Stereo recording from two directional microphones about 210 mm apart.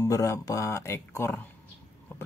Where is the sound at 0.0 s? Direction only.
15° left (ahead or behind).